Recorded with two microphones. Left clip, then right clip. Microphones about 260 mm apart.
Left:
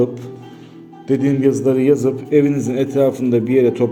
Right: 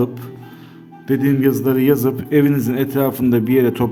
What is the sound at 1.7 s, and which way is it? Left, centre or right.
A man's voice, right.